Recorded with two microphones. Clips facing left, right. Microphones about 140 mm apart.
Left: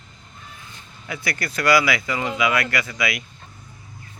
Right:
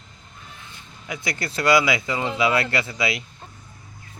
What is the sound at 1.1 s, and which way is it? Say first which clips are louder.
Speech: left 1 dB; 20° right (ahead or behind).